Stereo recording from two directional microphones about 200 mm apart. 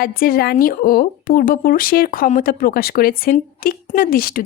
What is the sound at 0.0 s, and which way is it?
Speech, 45° left (ahead or behind).